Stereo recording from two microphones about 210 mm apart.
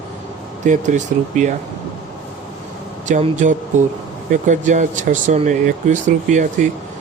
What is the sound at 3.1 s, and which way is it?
Speech, 35° right (ahead or behind).